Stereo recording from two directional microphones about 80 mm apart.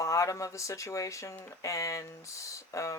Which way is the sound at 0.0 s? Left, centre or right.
Left.